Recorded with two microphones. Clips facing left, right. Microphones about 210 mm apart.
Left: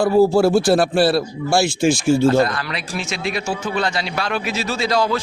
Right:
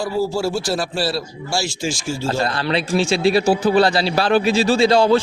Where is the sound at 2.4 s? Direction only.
30° right (ahead or behind).